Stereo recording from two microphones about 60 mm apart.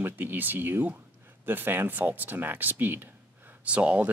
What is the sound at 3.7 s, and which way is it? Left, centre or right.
Speech, right.